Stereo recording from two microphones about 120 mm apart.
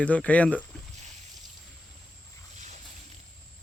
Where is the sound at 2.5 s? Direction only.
80° right.